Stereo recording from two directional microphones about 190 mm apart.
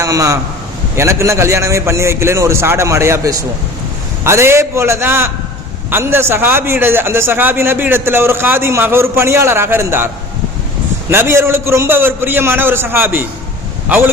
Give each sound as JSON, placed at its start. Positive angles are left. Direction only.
{"t": 0.0, "sound": "a man's voice", "side_deg": -15}
{"t": 11.1, "sound": "a man's voice", "side_deg": -10}